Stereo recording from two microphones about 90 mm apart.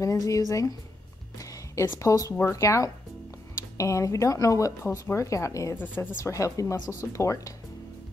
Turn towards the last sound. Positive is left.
turn(degrees=35)  # may be behind; listen again after turning